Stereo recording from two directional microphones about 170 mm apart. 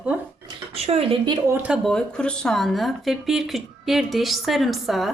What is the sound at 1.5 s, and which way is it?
Speech, 10° right (ahead or behind).